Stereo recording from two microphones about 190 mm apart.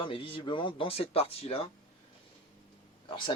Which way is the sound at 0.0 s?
30° left (ahead or behind).